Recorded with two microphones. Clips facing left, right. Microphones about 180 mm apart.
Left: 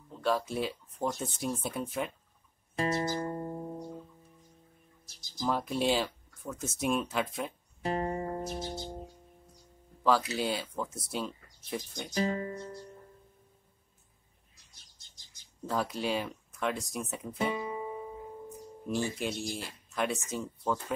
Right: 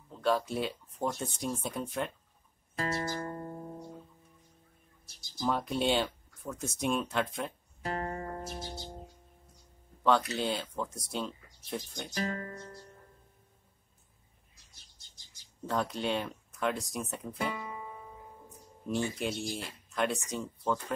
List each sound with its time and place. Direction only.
0.1 s speech: centre (ahead or behind)
2.7 s music: 25° left (ahead or behind)
5.4 s speech: centre (ahead or behind)
7.8 s music: 20° left (ahead or behind)
10.0 s speech: 5° left (ahead or behind)
12.1 s speech: 20° left (ahead or behind)
15.7 s speech: centre (ahead or behind)
17.4 s music: 20° left (ahead or behind)
19.0 s speech: centre (ahead or behind)